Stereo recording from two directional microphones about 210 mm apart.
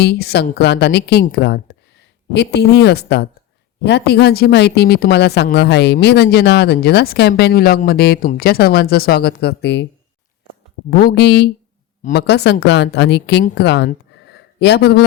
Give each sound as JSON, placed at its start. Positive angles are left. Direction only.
{"t": 0.0, "sound": "speech", "side_deg": 50}
{"t": 10.9, "sound": "speech", "side_deg": 50}